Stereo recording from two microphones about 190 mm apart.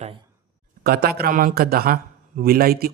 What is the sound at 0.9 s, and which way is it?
A man's voice, 55° right (ahead or behind).